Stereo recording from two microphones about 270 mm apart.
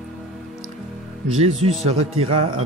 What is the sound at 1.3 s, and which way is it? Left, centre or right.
Speech, right.